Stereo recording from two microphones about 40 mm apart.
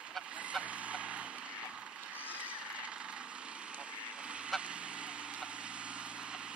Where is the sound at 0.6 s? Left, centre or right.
Right.